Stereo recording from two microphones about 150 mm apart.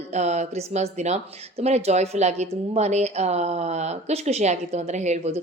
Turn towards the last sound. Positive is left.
turn(degrees=-50)  # may be behind; listen again after turning